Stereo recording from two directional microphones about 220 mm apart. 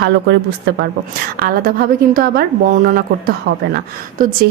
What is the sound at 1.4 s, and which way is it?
A woman's voice, 40° right (ahead or behind).